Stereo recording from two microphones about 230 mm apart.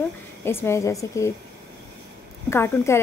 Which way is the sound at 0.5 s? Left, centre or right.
Centre.